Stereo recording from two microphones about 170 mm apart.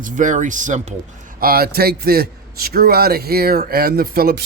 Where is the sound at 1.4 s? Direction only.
60° right (ahead or behind).